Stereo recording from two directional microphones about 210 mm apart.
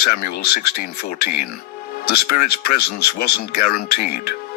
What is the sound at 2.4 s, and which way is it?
Speech, 45° left (ahead or behind).